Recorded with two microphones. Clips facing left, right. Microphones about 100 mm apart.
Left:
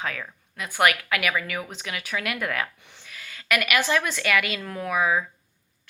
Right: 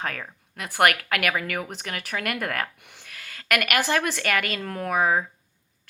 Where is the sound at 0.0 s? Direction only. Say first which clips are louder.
Even; 50° right (ahead or behind).